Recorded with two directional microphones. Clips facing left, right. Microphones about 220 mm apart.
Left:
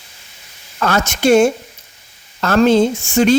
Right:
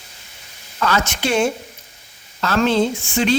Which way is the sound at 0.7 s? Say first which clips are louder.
Left 3 dB; 45° left (ahead or behind).